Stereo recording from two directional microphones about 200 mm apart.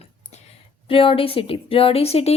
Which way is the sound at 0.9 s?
25° left (ahead or behind).